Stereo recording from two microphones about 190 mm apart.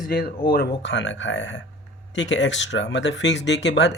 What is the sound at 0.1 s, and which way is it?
Speech, 50° left (ahead or behind).